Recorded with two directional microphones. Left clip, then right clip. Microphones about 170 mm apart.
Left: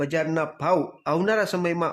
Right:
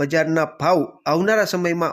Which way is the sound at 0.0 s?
20° right (ahead or behind).